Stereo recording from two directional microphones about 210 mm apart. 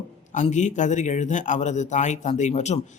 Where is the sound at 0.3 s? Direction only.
35° left (ahead or behind).